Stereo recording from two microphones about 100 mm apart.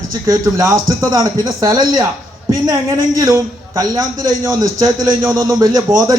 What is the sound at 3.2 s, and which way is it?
Speech, 35° right (ahead or behind).